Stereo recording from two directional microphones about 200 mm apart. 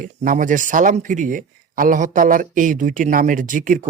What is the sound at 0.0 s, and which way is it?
Speech, 40° right (ahead or behind).